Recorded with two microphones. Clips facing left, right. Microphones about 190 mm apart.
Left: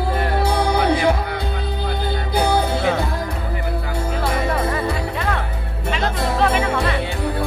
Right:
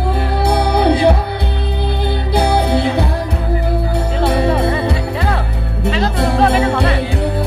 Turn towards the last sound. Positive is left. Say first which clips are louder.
# right 5 dB
turn(degrees=-35)  # may be behind; listen again after turning